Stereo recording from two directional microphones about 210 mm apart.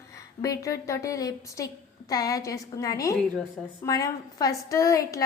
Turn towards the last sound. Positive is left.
turn(degrees=15)  # may be behind; listen again after turning